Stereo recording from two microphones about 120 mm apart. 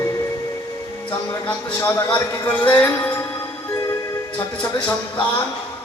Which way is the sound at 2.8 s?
15° left (ahead or behind).